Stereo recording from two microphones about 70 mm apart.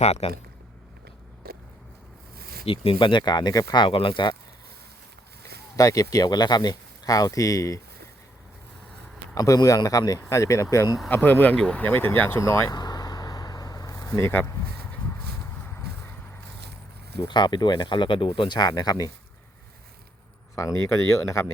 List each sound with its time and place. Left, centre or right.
3.2 s speech: left
5.7 s speech: left
9.3 s speech: left
10.2 s speech: left
11.1 s speech: left
11.9 s speech: left
12.4 s speech: left
12.7 s vehicle: left
14.2 s speech: left
17.2 s speech: left
20.6 s speech: left